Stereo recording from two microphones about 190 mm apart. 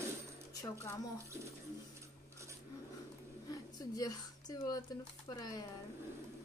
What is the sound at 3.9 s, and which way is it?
Speech, 20° left (ahead or behind).